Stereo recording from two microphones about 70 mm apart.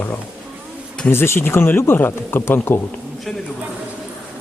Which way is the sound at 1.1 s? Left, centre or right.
Left.